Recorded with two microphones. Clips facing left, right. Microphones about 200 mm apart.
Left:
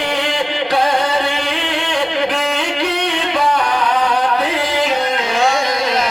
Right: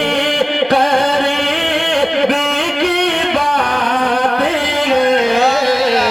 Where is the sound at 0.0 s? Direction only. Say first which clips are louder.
Right 4 dB; 55° right (ahead or behind).